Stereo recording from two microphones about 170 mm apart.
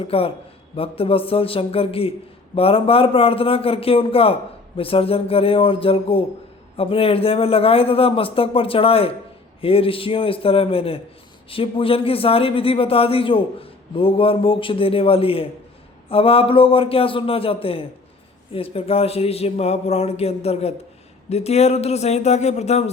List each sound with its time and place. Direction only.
0.1 s a man's voice: 35° left (ahead or behind)